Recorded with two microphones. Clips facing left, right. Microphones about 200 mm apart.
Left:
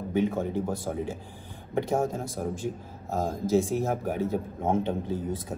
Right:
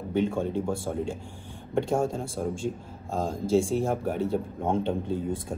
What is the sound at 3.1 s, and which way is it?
Speech, 15° right (ahead or behind).